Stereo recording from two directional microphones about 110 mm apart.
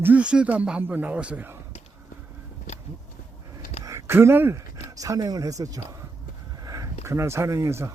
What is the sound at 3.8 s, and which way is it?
Speech, 25° right (ahead or behind).